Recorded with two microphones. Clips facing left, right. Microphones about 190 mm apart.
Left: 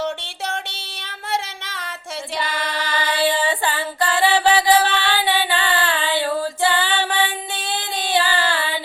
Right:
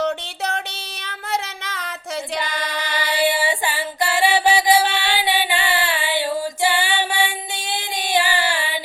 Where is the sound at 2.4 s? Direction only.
15° right (ahead or behind).